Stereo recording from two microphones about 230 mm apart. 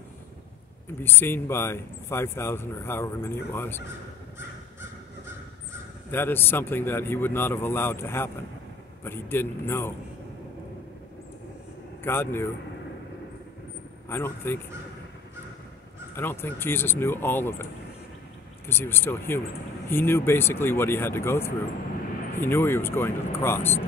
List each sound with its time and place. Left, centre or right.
1.0 s speech: centre
6.1 s speech: centre
12.0 s a man's voice: centre
14.0 s speech: centre
16.2 s speech: centre
18.7 s speech: centre